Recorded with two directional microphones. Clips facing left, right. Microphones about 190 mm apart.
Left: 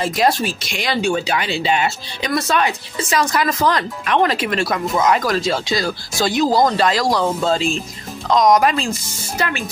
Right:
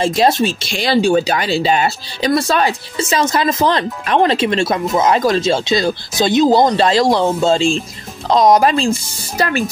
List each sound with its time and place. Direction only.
0.0 s speech: 25° right (ahead or behind)